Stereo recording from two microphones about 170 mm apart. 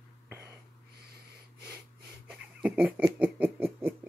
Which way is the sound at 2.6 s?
10° right (ahead or behind).